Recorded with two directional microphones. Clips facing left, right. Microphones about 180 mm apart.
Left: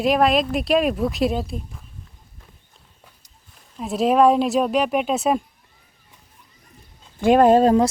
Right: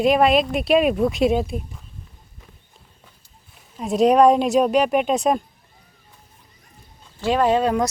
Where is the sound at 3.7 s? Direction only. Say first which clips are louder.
Right 2 dB; centre (ahead or behind).